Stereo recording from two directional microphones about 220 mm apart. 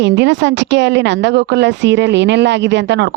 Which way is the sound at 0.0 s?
55° right (ahead or behind).